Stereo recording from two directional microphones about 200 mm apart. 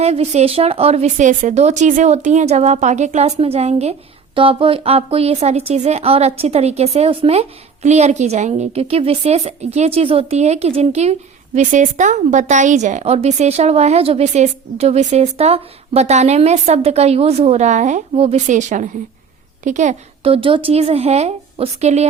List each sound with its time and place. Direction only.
0.0 s a woman's voice: 30° right (ahead or behind)